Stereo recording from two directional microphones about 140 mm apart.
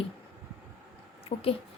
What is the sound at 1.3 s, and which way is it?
Speech, 40° left (ahead or behind).